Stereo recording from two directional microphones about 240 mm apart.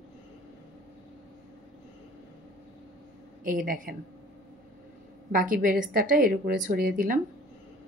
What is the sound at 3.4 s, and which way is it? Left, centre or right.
Speech, right.